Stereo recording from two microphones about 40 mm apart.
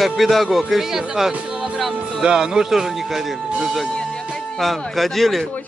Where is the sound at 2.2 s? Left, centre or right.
Right.